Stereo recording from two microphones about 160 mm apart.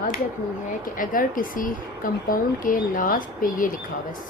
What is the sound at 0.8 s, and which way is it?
Speech, 60° left (ahead or behind).